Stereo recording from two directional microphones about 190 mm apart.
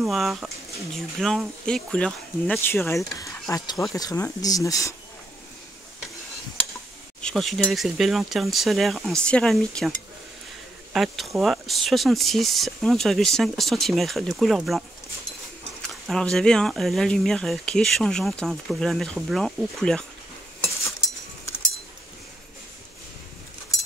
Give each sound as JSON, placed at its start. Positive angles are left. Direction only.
{"t": 0.0, "sound": "speech", "side_deg": 0}
{"t": 7.2, "sound": "speech", "side_deg": 5}
{"t": 15.9, "sound": "speech", "side_deg": 5}